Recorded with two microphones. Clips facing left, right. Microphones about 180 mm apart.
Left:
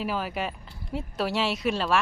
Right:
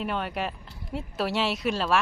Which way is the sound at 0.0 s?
Centre (ahead or behind).